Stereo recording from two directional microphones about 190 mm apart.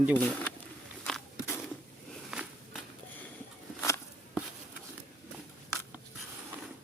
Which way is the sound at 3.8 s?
15° left (ahead or behind).